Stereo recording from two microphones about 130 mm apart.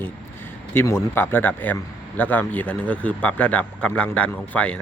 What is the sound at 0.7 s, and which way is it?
A man's voice, 20° left (ahead or behind).